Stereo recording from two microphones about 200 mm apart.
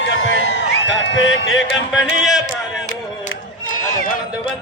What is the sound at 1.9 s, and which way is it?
Speech, 5° right (ahead or behind).